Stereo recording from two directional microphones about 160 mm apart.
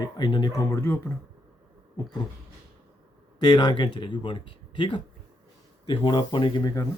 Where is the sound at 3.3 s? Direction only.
25° left (ahead or behind).